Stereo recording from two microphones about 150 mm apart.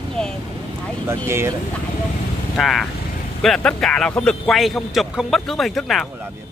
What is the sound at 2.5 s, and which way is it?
A man's voice, centre (ahead or behind).